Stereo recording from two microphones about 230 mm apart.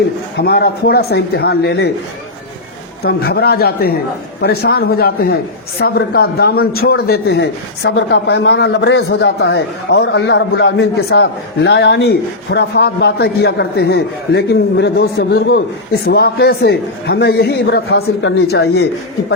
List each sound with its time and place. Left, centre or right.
0.3 s a man's voice: left
3.0 s a man's voice: left